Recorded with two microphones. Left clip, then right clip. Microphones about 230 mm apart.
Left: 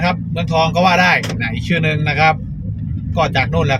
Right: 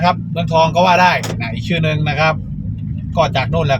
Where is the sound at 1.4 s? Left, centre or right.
Centre.